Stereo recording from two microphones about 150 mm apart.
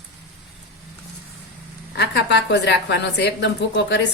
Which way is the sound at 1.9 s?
90° left.